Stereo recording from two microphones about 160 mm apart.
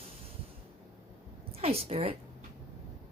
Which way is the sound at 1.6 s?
40° right (ahead or behind).